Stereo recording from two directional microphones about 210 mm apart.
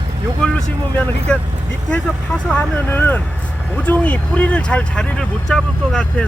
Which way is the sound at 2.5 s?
10° left (ahead or behind).